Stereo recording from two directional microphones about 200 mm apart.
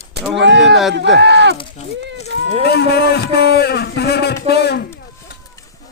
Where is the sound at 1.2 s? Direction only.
60° right (ahead or behind).